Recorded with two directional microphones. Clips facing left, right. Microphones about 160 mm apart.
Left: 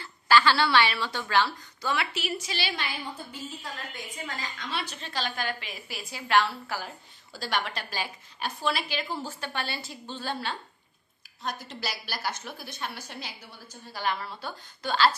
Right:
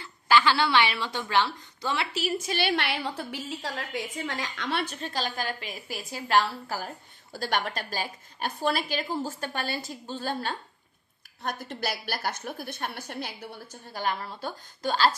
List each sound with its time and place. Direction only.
0.0 s a woman's voice: 15° right (ahead or behind)
2.1 s a woman's voice: 45° right (ahead or behind)
7.3 s a woman's voice: 50° right (ahead or behind)